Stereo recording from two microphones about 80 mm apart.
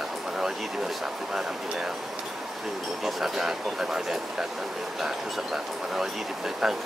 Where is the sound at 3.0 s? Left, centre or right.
Centre.